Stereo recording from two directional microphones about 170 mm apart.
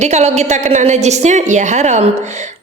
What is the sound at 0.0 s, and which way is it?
A woman's voice, 40° right (ahead or behind).